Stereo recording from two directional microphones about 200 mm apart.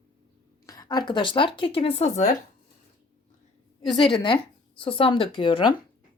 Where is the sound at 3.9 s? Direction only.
25° left (ahead or behind).